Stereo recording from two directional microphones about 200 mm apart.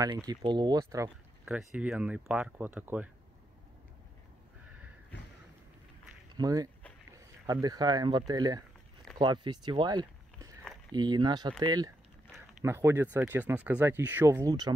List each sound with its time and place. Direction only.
0.3 s speech: 25° right (ahead or behind)
1.4 s speech: centre (ahead or behind)
6.3 s speech: 20° right (ahead or behind)